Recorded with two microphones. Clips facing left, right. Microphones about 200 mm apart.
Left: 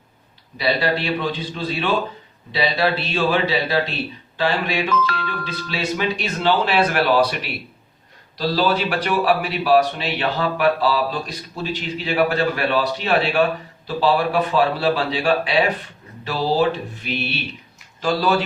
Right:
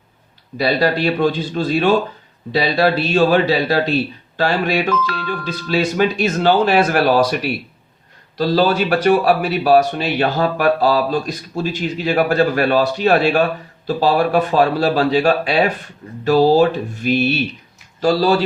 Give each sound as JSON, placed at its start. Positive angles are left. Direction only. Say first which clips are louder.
{"t": 0.6, "sound": "a man's voice", "louder": "right 5 dB", "side_deg": -45}